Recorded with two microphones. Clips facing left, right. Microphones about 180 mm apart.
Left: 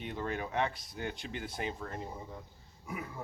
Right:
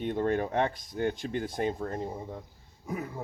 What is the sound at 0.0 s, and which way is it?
Speech, 50° right (ahead or behind).